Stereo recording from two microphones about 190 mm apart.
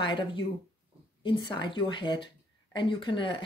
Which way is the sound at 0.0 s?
25° left (ahead or behind).